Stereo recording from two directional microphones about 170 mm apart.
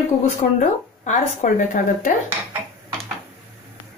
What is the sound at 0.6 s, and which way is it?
Speech, 50° left (ahead or behind).